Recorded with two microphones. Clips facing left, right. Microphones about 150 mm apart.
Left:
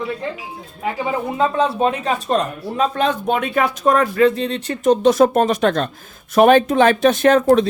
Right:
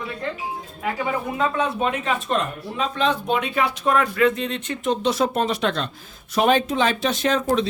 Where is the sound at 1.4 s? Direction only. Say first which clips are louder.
Left 6 dB; 30° left (ahead or behind).